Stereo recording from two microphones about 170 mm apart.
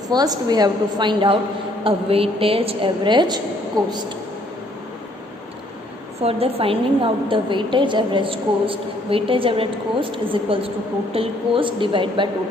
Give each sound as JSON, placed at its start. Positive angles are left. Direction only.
{"t": 0.1, "sound": "a woman's voice", "side_deg": -25}
{"t": 6.2, "sound": "a woman's voice", "side_deg": -35}